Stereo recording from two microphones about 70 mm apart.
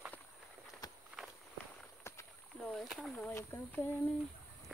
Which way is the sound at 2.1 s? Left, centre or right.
Left.